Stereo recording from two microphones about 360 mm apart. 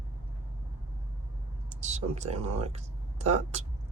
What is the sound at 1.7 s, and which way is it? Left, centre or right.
Speech, centre.